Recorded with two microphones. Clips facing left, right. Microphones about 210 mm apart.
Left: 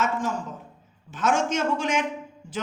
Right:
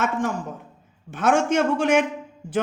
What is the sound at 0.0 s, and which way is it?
A woman's voice, 60° right (ahead or behind).